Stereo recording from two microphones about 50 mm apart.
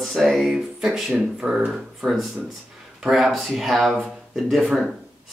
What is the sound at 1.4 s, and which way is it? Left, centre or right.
Speech, right.